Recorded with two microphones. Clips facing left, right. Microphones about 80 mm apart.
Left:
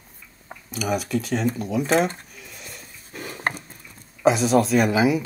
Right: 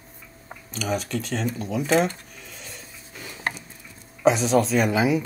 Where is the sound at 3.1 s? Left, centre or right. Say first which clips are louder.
Left 3 dB; left.